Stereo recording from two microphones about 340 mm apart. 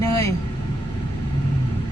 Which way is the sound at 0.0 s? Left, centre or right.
Centre.